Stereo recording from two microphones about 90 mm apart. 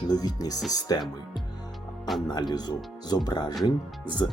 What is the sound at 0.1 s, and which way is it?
Speech, 45° left (ahead or behind).